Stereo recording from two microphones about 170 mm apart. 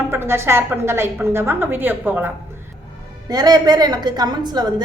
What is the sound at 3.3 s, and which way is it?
A woman's voice, 25° right (ahead or behind).